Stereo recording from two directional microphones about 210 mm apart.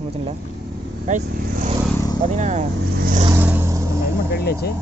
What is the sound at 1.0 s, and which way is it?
Speech, 35° right (ahead or behind).